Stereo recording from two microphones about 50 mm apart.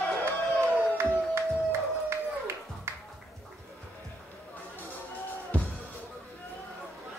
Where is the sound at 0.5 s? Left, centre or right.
Right.